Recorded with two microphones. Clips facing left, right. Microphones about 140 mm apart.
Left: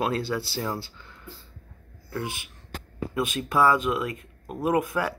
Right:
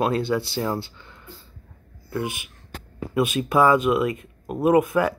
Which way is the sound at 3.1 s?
5° right (ahead or behind).